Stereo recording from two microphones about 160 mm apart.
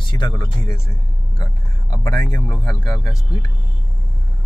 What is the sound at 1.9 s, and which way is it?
Speech, 20° left (ahead or behind).